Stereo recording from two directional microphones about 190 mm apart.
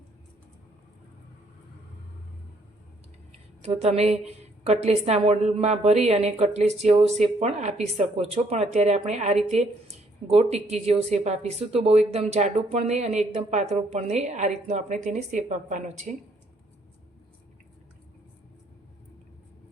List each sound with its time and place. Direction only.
3.6 s a woman's voice: 35° right (ahead or behind)